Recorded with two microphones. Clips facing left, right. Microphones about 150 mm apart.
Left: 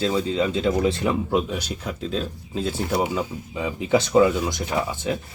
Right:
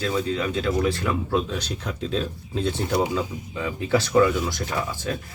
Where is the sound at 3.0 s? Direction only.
15° left (ahead or behind).